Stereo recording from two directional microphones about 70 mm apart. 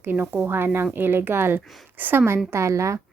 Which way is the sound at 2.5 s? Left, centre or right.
Right.